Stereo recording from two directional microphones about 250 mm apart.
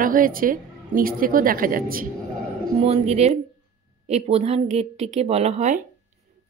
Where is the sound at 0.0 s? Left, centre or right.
Right.